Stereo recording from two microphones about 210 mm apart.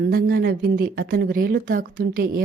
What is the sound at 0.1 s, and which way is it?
Speech, 45° right (ahead or behind).